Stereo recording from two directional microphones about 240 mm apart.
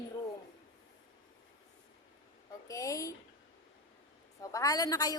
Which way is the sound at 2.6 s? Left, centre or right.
Centre.